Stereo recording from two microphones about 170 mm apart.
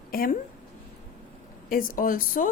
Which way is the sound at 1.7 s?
55° left (ahead or behind).